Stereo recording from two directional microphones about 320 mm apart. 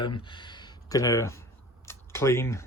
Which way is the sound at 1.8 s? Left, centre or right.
Centre.